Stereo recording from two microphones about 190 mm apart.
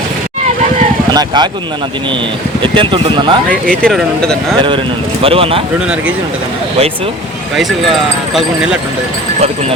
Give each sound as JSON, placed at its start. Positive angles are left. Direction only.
{"t": 1.1, "sound": "speech", "side_deg": -20}
{"t": 2.7, "sound": "speech", "side_deg": -25}
{"t": 3.8, "sound": "speech", "side_deg": 5}
{"t": 5.2, "sound": "speech", "side_deg": -30}
{"t": 8.3, "sound": "speech", "side_deg": 0}